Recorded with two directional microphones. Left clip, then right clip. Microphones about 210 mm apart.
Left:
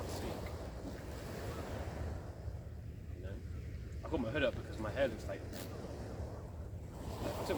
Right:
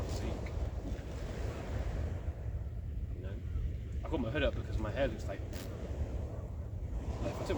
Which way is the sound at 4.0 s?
10° right (ahead or behind).